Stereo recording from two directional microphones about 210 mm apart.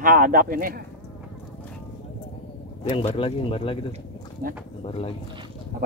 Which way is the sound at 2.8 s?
30° left (ahead or behind).